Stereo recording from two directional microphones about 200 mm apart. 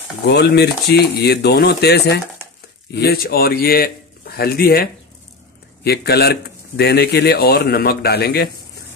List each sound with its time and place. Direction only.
0.2 s speech: 55° left (ahead or behind)
5.9 s speech: 55° left (ahead or behind)